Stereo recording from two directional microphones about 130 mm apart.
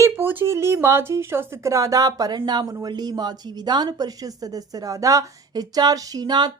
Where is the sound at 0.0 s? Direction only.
15° right (ahead or behind).